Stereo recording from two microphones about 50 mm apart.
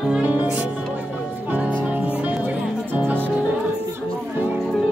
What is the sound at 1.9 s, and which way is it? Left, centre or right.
Music, right.